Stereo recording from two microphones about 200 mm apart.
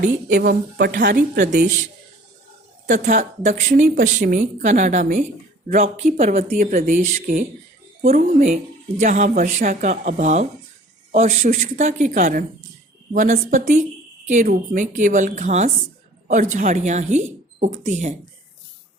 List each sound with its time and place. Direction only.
0.0 s a woman's voice: 50° right (ahead or behind)
2.9 s a woman's voice: 40° right (ahead or behind)